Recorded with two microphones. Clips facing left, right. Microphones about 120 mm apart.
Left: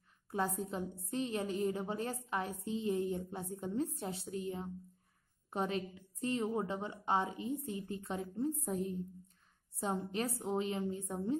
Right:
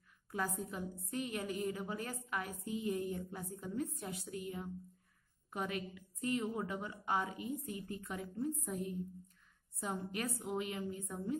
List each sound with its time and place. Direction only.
0.3 s a woman's voice: 30° left (ahead or behind)